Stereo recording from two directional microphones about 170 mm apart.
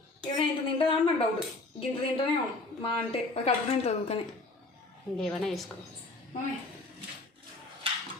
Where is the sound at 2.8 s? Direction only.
35° left (ahead or behind).